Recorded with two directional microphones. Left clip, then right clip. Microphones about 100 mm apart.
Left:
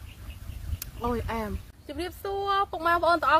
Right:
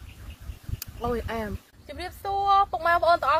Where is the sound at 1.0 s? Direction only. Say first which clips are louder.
Right 1 dB; 20° left (ahead or behind).